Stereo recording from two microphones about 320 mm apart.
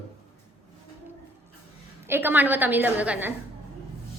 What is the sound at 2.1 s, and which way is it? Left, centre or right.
A woman's voice, centre.